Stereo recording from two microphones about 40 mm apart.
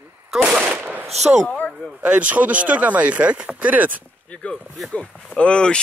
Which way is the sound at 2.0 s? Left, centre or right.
Right.